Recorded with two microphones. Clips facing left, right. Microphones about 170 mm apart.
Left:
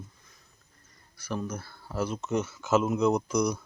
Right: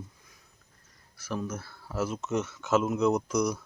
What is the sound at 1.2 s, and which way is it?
Speech, centre (ahead or behind).